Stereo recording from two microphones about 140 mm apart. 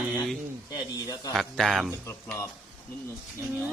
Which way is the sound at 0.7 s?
30° left (ahead or behind).